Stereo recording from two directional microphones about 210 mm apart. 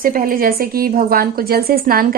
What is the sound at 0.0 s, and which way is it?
A woman's voice, 45° right (ahead or behind).